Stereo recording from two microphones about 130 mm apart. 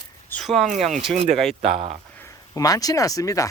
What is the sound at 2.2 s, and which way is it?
Speech, 25° left (ahead or behind).